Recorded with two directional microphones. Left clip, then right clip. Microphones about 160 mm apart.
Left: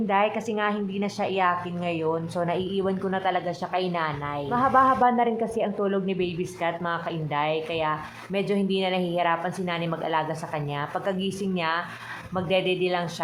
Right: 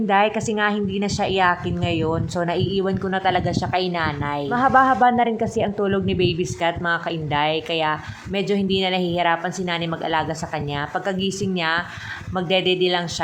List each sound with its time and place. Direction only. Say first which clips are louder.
0.1 s speech: right 5 dB; 30° right (ahead or behind)